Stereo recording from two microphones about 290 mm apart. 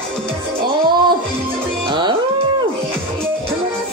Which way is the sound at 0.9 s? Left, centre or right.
Centre.